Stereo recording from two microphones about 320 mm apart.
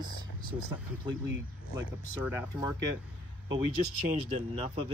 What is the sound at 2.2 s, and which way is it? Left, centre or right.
Speech, centre.